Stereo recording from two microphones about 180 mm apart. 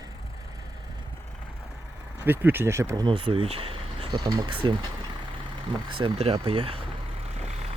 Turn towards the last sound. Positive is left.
turn(degrees=-30)  # may be behind; listen again after turning